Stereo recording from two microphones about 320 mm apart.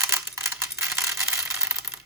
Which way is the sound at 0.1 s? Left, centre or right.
Centre.